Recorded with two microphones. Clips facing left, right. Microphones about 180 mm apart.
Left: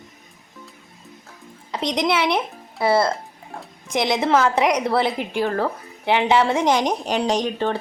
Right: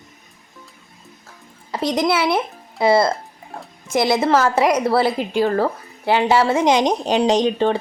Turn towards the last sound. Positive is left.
turn(degrees=-20)  # may be behind; listen again after turning